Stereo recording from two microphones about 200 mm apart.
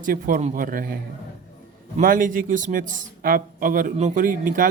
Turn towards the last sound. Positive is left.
turn(degrees=-40)  # may be behind; listen again after turning